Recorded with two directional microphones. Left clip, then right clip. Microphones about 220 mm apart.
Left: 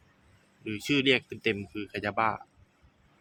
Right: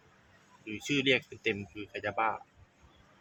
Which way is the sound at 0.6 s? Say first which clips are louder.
Left 3 dB; 30° left (ahead or behind).